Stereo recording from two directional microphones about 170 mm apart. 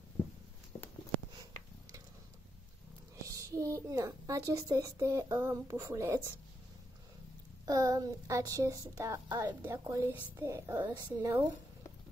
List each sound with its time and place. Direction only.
3.2 s a child's voice: 20° right (ahead or behind)
7.6 s a woman's voice: 20° right (ahead or behind)